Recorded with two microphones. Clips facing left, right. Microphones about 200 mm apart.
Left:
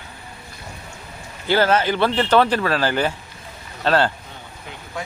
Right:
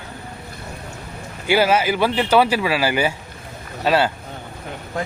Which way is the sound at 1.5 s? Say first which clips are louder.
Right 1 dB; 10° right (ahead or behind).